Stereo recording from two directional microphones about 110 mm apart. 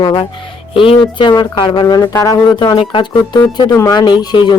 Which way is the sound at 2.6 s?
50° left (ahead or behind).